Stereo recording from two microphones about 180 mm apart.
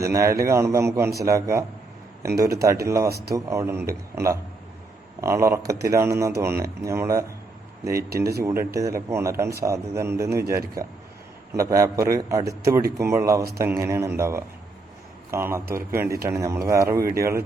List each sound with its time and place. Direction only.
0.0 s speech: 15° right (ahead or behind)
8.1 s speech: 60° right (ahead or behind)
8.7 s speech: 15° right (ahead or behind)
10.4 s speech: 55° right (ahead or behind)
11.5 s speech: 20° right (ahead or behind)